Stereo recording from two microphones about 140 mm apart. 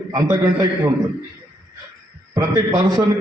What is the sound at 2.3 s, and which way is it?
Speech, 25° right (ahead or behind).